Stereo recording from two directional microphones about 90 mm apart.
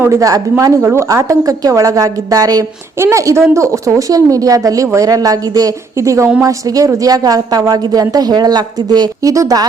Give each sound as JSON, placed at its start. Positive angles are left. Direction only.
{"t": 0.0, "sound": "a woman's voice", "side_deg": -35}